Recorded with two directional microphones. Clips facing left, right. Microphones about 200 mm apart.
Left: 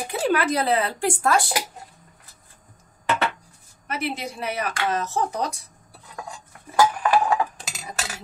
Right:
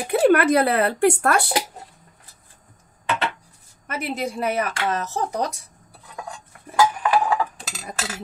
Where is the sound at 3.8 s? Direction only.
45° right (ahead or behind).